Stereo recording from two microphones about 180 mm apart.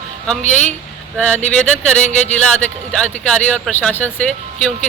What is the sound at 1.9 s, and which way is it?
Speech, 40° left (ahead or behind).